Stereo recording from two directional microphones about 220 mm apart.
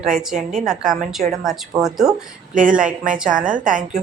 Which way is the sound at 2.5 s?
35° right (ahead or behind).